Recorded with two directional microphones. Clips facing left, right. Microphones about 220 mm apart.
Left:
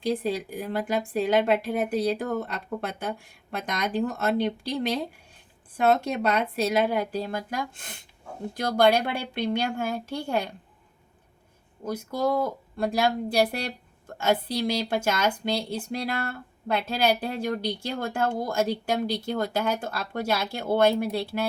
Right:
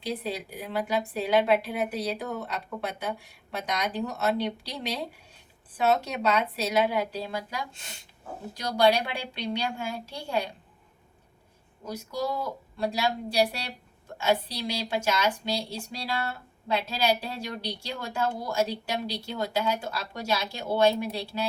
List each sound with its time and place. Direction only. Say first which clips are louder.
0.0 s speech: left 6 dB; 50° left (ahead or behind)
11.9 s speech: left 5 dB; 55° left (ahead or behind)